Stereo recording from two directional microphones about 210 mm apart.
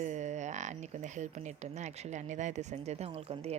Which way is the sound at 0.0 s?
35° right (ahead or behind).